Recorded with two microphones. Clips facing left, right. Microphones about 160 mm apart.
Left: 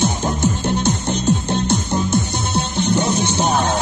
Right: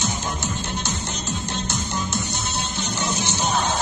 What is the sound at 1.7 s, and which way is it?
Music, 55° left (ahead or behind).